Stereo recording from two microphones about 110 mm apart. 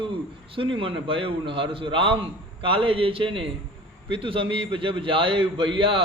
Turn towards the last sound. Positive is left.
turn(degrees=-50)  # may be behind; listen again after turning